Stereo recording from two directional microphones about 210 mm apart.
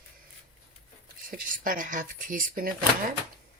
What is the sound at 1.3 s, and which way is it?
Speech, 40° right (ahead or behind).